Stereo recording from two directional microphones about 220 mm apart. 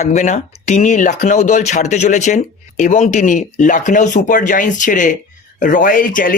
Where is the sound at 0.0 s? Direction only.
30° left (ahead or behind).